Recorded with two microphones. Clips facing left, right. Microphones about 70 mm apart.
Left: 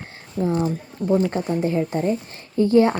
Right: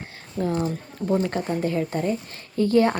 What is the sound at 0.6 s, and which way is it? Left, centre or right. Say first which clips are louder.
Speech: left 3 dB; centre.